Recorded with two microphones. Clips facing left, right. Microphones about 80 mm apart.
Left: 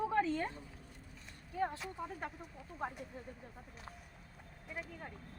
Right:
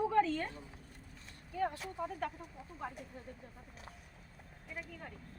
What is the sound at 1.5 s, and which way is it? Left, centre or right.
Speech, left.